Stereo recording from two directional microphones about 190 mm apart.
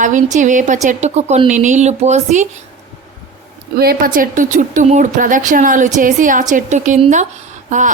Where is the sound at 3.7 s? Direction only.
50° right (ahead or behind).